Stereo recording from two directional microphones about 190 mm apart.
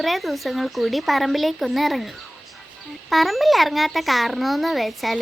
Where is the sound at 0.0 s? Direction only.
Centre (ahead or behind).